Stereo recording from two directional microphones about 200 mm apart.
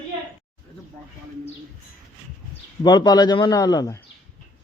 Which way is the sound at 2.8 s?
20° left (ahead or behind).